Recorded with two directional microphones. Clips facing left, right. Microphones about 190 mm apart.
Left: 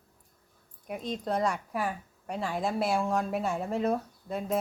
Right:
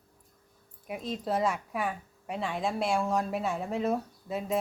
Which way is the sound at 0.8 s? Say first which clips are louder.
Even; 5° right (ahead or behind).